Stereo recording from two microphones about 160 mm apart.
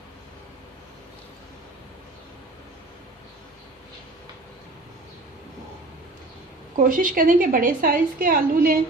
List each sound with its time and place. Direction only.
6.7 s a woman's voice: 60° right (ahead or behind)